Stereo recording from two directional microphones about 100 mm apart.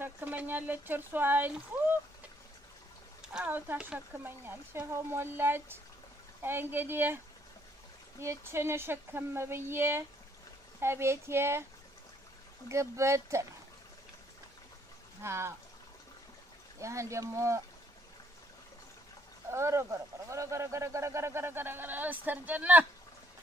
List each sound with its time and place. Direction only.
0.0 s speech: 20° right (ahead or behind)
3.4 s speech: 20° right (ahead or behind)
8.2 s speech: 25° right (ahead or behind)
12.6 s speech: 30° right (ahead or behind)
15.2 s speech: 25° right (ahead or behind)
16.8 s speech: 30° right (ahead or behind)
19.5 s speech: 30° right (ahead or behind)